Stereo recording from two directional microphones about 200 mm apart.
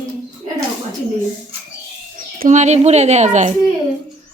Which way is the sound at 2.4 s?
35° right (ahead or behind).